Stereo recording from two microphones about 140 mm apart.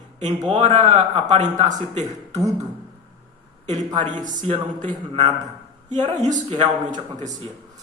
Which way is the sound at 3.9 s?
65° right (ahead or behind).